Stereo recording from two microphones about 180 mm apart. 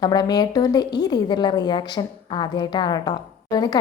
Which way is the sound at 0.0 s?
20° left (ahead or behind).